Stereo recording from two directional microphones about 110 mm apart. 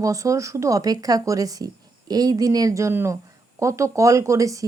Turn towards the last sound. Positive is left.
turn(degrees=-30)  # may be behind; listen again after turning